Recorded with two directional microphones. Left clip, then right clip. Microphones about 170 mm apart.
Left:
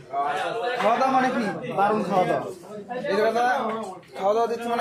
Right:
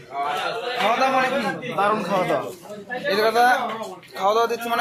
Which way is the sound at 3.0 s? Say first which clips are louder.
Right 4 dB; 25° right (ahead or behind).